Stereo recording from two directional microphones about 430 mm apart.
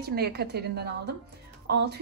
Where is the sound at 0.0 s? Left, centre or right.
Right.